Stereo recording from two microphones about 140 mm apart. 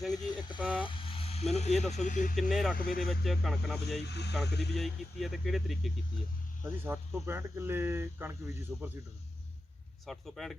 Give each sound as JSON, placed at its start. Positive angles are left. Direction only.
{"t": 0.1, "sound": "speech", "side_deg": 30}
{"t": 0.8, "sound": "vehicle", "side_deg": 40}
{"t": 1.5, "sound": "speech", "side_deg": 50}
{"t": 2.3, "sound": "speech", "side_deg": 0}
{"t": 2.7, "sound": "speech", "side_deg": 90}
{"t": 3.2, "sound": "speech", "side_deg": 0}
{"t": 6.8, "sound": "speech", "side_deg": -15}
{"t": 10.1, "sound": "speech", "side_deg": 0}